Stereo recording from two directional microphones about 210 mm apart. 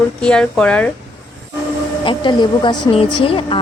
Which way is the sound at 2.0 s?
25° left (ahead or behind).